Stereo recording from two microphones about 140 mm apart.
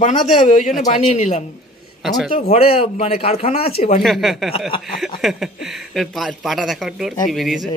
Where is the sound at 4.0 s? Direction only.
Centre (ahead or behind).